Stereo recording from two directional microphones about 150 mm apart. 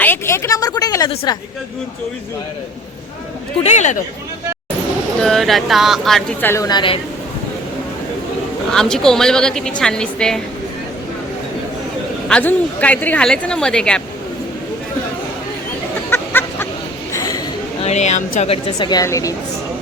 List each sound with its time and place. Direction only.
0.0 s a woman's voice: 15° left (ahead or behind)
3.6 s speech: 50° left (ahead or behind)
5.2 s a woman's voice: centre (ahead or behind)
6.4 s a woman's voice: 15° left (ahead or behind)
6.7 s a woman's voice: 30° left (ahead or behind)
8.7 s a woman's voice: 5° left (ahead or behind)
12.3 s a woman's voice: 10° left (ahead or behind)
16.0 s a sound: 15° left (ahead or behind)
17.8 s speech: 50° left (ahead or behind)
18.9 s a woman's voice: 25° left (ahead or behind)